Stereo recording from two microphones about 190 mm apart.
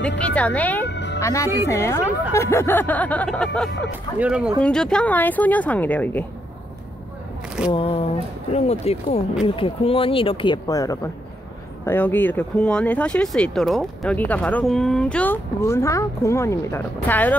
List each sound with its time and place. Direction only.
0.2 s speech: 5° left (ahead or behind)
0.8 s music: 70° left (ahead or behind)
1.2 s speech: 15° left (ahead or behind)
7.7 s speech: 30° left (ahead or behind); by 17.4 s 10° left (ahead or behind)